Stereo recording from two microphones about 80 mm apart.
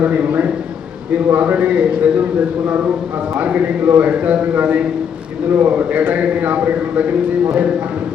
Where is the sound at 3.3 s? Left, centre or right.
Centre.